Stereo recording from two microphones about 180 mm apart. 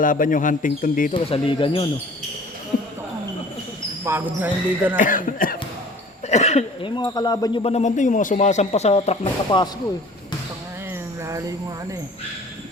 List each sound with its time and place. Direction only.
0.0 s speech: 50° left (ahead or behind)
1.1 s speech: 30° left (ahead or behind)
2.7 s a sound: 50° left (ahead or behind)
4.0 s speech: 10° right (ahead or behind)
4.9 s speech: 50° left (ahead or behind)
6.2 s speech: 35° left (ahead or behind)